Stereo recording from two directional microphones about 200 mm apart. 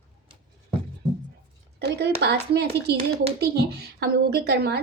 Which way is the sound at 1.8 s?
55° right (ahead or behind).